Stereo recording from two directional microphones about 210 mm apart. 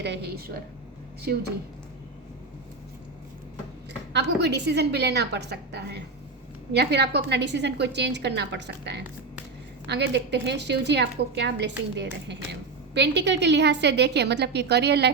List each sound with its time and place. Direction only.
0.0 s a woman's voice: 50° right (ahead or behind)
4.1 s a woman's voice: 55° right (ahead or behind)